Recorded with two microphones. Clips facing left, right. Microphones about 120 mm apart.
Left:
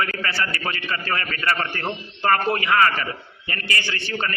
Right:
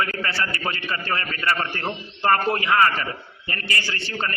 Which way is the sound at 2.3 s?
25° right (ahead or behind).